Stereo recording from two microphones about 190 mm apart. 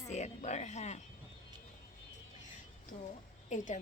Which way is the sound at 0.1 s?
40° left (ahead or behind).